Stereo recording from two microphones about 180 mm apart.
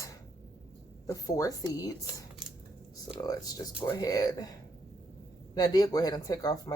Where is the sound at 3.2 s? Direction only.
20° left (ahead or behind).